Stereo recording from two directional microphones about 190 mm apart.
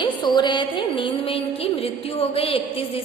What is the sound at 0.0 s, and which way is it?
Music, 20° left (ahead or behind).